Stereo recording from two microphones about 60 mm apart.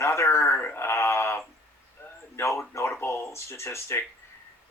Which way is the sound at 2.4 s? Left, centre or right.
Left.